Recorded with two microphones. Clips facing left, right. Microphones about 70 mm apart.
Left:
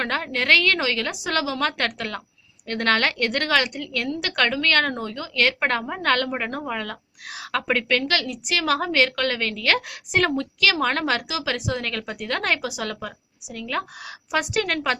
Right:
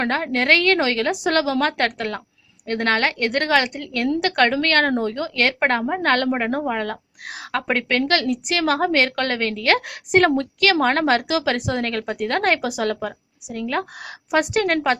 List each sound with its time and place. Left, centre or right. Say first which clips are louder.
0.0 s a woman's voice: right 4 dB; right
10.1 s a woman's voice: right 6 dB; right